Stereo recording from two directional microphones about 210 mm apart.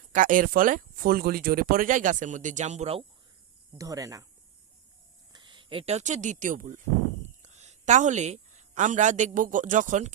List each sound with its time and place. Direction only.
0.1 s speech: 40° right (ahead or behind)
3.8 s speech: 15° right (ahead or behind)
5.3 s a woman's voice: 20° right (ahead or behind)